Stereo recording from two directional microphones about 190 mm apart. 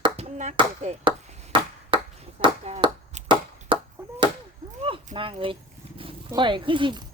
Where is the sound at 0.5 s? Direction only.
30° right (ahead or behind).